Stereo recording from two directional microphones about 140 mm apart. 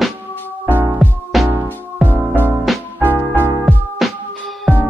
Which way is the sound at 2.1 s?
15° right (ahead or behind).